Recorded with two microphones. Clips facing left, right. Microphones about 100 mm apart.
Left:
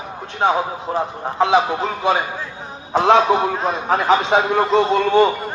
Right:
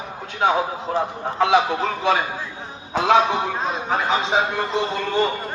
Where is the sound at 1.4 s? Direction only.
20° left (ahead or behind).